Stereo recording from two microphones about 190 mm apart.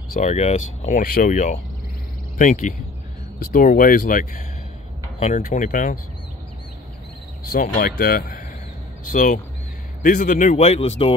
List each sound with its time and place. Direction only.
0.1 s speech: 35° left (ahead or behind)
7.4 s speech: 50° left (ahead or behind); by 11.1 s 30° left (ahead or behind)